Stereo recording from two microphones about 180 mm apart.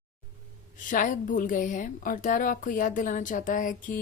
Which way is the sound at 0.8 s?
45° left (ahead or behind).